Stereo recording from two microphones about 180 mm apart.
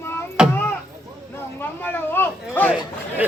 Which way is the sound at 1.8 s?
10° left (ahead or behind).